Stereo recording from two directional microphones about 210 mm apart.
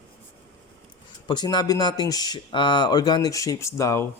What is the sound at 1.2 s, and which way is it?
Speech, 20° left (ahead or behind).